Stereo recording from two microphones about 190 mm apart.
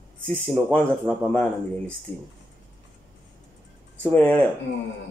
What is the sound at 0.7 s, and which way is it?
Speech, 5° left (ahead or behind).